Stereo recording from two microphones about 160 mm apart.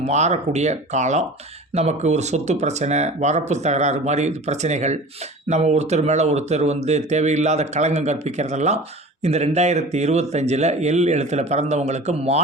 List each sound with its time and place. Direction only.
0.0 s speech: 45° right (ahead or behind)